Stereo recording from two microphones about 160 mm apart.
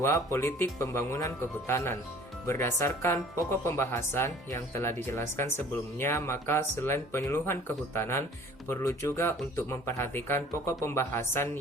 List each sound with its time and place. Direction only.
0.0 s speech: 20° left (ahead or behind)